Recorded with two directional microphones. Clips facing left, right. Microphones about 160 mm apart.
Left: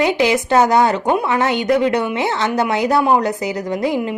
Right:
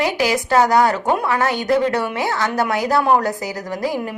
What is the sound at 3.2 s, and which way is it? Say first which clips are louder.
Speech: left 3 dB; 20° left (ahead or behind).